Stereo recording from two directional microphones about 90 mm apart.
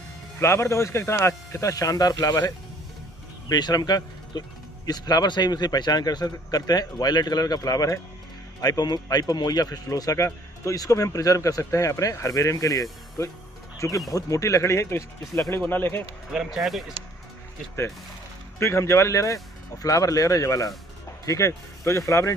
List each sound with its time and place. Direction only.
0.4 s speech: 30° left (ahead or behind)
16.3 s speech: 5° right (ahead or behind)
18.6 s speech: 30° left (ahead or behind)